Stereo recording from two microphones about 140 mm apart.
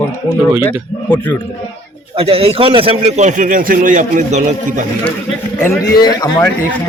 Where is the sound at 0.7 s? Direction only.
10° left (ahead or behind).